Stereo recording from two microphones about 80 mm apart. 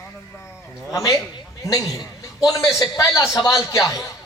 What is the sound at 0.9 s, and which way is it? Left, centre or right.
A man's voice, left.